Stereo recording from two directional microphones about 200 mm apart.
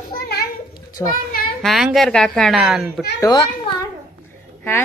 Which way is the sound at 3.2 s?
20° left (ahead or behind).